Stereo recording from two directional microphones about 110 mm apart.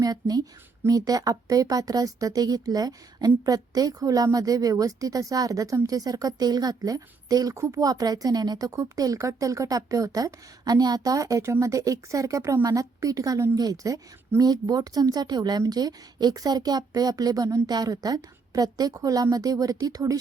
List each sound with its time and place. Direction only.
0.0 s speech: 35° right (ahead or behind)